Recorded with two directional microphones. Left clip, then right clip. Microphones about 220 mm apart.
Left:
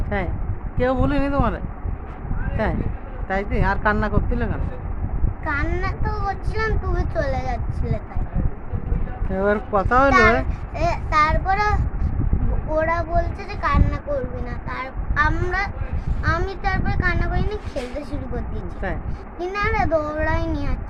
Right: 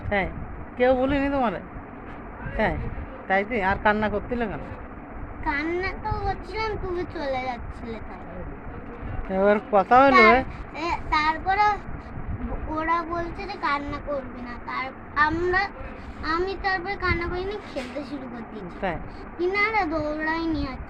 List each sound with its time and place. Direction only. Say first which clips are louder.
0.1 s a woman's voice: right 1 dB; 10° left (ahead or behind)
3.2 s a woman's voice: even; 10° left (ahead or behind)
9.3 s speech: right 1 dB; 5° left (ahead or behind)
10.8 s speech: left 5 dB; 20° left (ahead or behind)
18.8 s a woman's voice: right 1 dB; 5° left (ahead or behind)
19.4 s speech: even; 25° left (ahead or behind)